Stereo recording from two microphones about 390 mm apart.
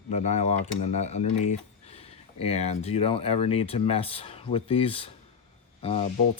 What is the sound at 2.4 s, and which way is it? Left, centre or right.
Speech, centre.